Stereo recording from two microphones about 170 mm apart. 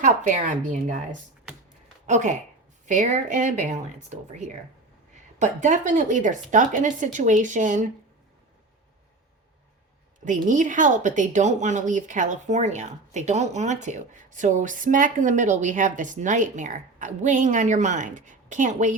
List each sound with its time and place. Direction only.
0.0 s a woman's voice: 50° right (ahead or behind)
10.2 s a woman's voice: 50° right (ahead or behind)